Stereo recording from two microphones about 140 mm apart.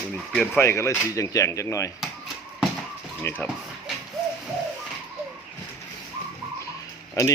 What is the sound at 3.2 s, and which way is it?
Speech, 15° left (ahead or behind).